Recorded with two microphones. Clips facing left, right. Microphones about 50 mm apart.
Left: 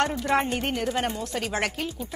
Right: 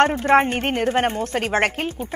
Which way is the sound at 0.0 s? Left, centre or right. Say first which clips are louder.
Right 8 dB; right.